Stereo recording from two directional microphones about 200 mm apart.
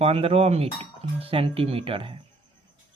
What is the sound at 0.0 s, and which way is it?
Speech, 30° right (ahead or behind).